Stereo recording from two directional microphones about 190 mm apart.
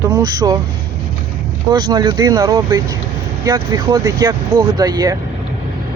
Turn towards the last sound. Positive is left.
turn(degrees=-20)  # may be behind; listen again after turning